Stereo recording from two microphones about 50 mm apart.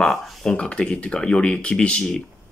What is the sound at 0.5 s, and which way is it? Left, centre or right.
Speech, centre.